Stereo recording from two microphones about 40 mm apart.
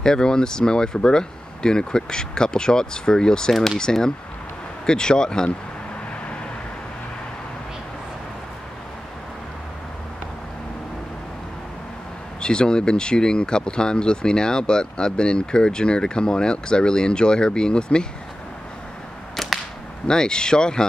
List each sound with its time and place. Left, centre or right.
0.0 s speech: centre
12.4 s speech: left
19.3 s whip: centre
20.1 s speech: centre